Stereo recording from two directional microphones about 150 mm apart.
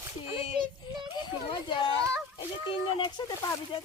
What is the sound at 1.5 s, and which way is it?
Speech, 30° left (ahead or behind).